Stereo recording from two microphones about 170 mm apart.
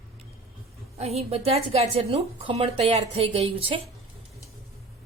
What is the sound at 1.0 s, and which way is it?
A woman's voice, 35° right (ahead or behind).